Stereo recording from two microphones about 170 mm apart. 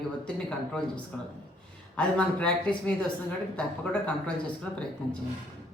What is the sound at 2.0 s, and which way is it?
Speech, 5° left (ahead or behind).